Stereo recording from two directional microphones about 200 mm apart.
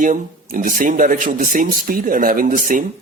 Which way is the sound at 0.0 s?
40° right (ahead or behind).